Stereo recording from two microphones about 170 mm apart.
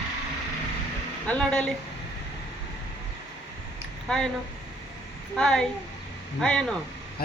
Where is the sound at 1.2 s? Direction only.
5° left (ahead or behind).